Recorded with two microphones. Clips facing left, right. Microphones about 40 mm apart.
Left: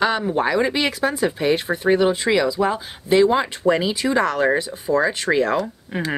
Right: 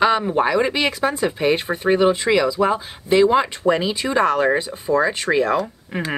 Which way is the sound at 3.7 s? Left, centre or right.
Right.